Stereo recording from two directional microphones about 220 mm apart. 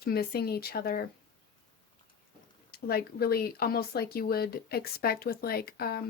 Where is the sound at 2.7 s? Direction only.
45° left (ahead or behind).